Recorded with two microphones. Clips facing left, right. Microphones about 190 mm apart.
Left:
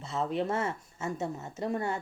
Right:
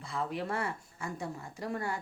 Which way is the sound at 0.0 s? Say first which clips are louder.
Left 5 dB; 25° left (ahead or behind).